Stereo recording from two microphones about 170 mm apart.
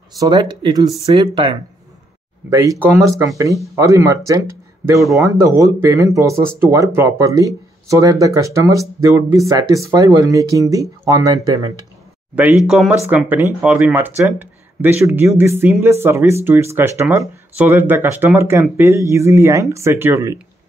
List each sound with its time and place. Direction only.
0.2 s speech: 25° right (ahead or behind)
4.5 s a sound: 15° right (ahead or behind)
5.1 s speech: 20° right (ahead or behind)
12.4 s speech: 5° right (ahead or behind)
12.9 s speech: 15° right (ahead or behind)